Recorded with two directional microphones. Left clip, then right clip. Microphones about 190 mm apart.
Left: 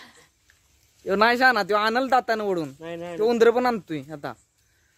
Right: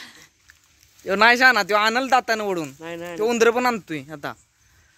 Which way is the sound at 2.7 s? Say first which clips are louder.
Right 1 dB; 10° right (ahead or behind).